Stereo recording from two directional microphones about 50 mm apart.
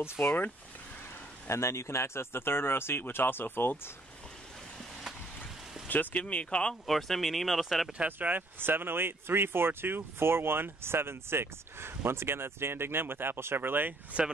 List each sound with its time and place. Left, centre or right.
0.2 s speech: left
1.5 s speech: left
5.9 s speech: left
6.7 s speech: centre
8.2 s speech: right